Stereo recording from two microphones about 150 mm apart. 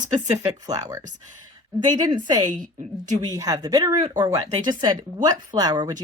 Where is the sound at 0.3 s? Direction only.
25° right (ahead or behind).